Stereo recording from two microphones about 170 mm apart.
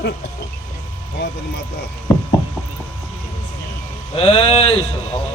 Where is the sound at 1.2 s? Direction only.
90° left.